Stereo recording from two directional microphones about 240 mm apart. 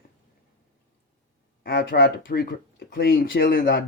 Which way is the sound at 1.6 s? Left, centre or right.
Left.